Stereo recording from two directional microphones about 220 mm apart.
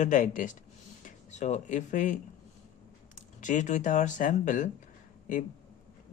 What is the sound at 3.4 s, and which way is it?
Speech, 35° left (ahead or behind).